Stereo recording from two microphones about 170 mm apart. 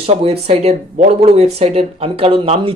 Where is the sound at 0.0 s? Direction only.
35° right (ahead or behind).